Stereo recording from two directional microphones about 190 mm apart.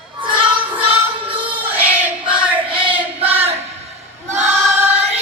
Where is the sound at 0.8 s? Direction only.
30° right (ahead or behind).